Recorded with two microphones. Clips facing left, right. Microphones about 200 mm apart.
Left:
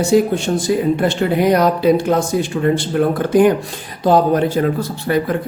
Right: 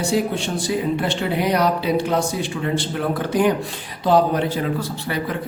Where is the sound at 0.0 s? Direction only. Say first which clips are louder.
Left 7 dB; 45° left (ahead or behind).